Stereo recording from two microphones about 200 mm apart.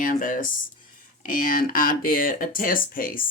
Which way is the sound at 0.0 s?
40° left (ahead or behind).